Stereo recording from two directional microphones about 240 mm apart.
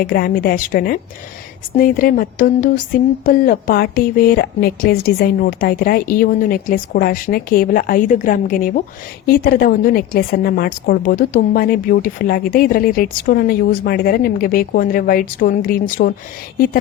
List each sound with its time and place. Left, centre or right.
0.0 s speech: left